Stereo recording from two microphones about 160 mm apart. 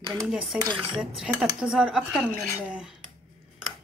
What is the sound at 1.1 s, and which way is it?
Speech, 5° right (ahead or behind).